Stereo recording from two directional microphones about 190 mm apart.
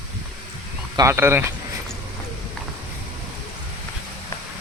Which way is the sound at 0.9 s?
15° right (ahead or behind).